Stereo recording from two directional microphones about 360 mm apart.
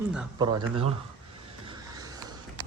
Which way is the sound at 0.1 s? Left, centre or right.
Centre.